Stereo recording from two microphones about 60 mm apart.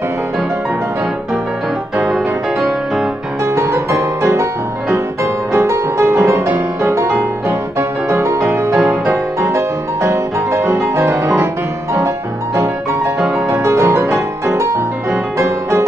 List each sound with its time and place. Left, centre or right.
2.0 s music: centre
3.4 s music: right
8.1 s music: right
13.5 s music: right